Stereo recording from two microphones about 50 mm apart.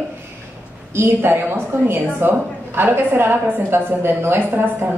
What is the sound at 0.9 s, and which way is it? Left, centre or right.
A woman's voice, right.